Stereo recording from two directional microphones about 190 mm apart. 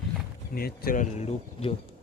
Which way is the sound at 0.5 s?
50° left (ahead or behind).